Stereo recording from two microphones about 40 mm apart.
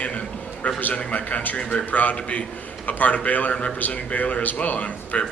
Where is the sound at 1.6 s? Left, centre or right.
Left.